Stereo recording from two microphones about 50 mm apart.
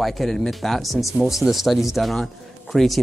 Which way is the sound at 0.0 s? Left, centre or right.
Centre.